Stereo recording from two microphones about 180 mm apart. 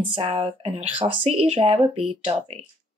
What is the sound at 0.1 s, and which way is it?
Speech, 30° right (ahead or behind).